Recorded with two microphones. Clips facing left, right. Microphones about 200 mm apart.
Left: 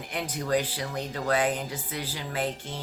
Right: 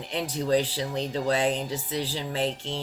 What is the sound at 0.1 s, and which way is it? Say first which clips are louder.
Speech: right 3 dB; 30° right (ahead or behind).